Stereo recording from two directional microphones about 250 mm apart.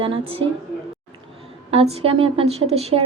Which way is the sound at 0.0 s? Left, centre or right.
Right.